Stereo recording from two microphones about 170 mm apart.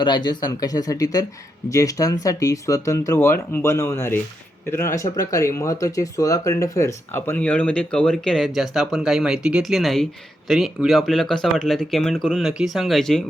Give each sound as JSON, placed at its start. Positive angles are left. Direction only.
{"t": 0.0, "sound": "speech", "side_deg": 25}